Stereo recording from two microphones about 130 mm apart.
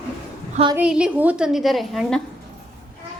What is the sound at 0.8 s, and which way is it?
Speech, 5° right (ahead or behind).